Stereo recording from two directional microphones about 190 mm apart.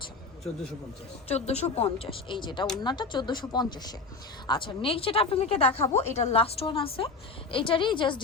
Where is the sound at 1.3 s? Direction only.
35° left (ahead or behind).